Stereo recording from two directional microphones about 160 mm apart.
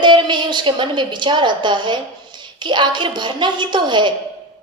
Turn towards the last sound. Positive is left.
turn(degrees=-30)  # may be behind; listen again after turning